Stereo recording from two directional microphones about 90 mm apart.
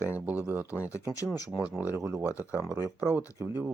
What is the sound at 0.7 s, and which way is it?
Speech, 35° left (ahead or behind).